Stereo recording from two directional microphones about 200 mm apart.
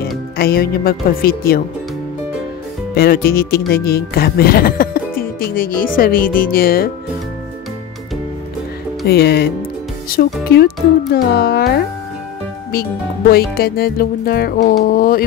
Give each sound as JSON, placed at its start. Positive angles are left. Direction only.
{"t": 0.4, "sound": "speech", "side_deg": 50}
{"t": 2.9, "sound": "speech", "side_deg": 50}
{"t": 9.0, "sound": "speech", "side_deg": 50}
{"t": 13.3, "sound": "speech", "side_deg": 50}